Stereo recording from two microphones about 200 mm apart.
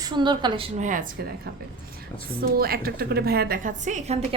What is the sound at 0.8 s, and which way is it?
Speech, 40° right (ahead or behind).